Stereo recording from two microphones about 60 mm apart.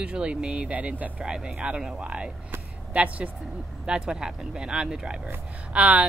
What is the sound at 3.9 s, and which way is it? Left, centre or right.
Speech, centre.